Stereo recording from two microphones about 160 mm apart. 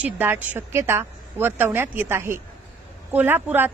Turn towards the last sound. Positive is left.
turn(degrees=-15)  # may be behind; listen again after turning